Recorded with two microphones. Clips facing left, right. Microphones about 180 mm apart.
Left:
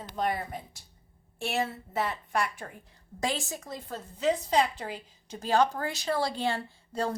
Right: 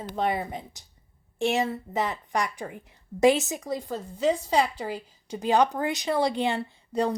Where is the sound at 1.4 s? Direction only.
15° right (ahead or behind).